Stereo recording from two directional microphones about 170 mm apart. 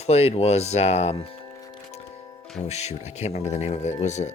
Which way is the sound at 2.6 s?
40° left (ahead or behind).